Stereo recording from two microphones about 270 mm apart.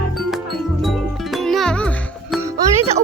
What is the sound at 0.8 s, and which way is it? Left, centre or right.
Music, centre.